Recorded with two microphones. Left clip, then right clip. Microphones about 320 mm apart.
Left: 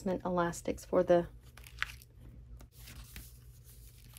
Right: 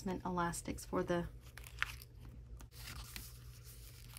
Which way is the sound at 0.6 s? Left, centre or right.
Centre.